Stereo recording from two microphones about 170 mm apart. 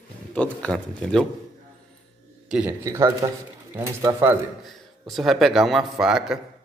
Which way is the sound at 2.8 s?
20° right (ahead or behind).